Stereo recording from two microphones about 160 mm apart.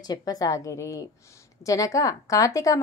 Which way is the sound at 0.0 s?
25° left (ahead or behind).